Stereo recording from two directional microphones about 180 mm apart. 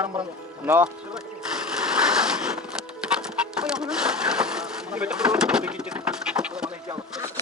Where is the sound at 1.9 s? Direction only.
5° right (ahead or behind).